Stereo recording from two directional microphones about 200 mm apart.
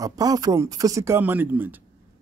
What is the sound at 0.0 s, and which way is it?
Speech, 20° right (ahead or behind).